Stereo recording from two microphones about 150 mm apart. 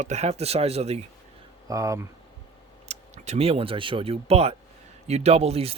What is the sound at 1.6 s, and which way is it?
Speech, 20° right (ahead or behind).